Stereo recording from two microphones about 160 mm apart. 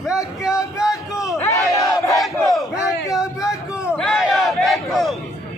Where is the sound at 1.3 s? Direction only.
20° left (ahead or behind).